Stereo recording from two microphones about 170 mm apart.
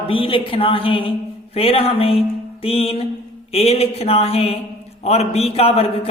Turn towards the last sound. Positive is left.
turn(degrees=35)  # may be behind; listen again after turning